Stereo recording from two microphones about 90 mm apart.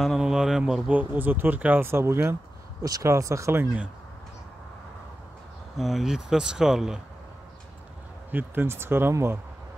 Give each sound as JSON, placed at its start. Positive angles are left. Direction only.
{"t": 0.0, "sound": "a sound", "side_deg": -5}
{"t": 0.9, "sound": "speech", "side_deg": -20}
{"t": 2.8, "sound": "speech", "side_deg": -35}
{"t": 5.8, "sound": "speech", "side_deg": 0}
{"t": 8.3, "sound": "speech", "side_deg": -20}